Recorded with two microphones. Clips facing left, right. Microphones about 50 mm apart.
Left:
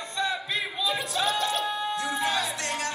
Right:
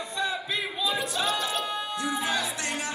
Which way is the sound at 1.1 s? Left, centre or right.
Centre.